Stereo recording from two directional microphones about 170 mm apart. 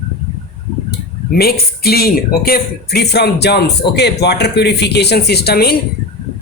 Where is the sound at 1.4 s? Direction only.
65° left (ahead or behind).